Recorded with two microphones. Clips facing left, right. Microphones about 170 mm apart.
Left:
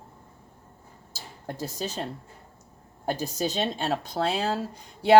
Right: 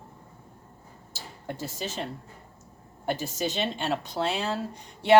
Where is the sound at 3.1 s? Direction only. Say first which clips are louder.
Left 1 dB; 40° left (ahead or behind).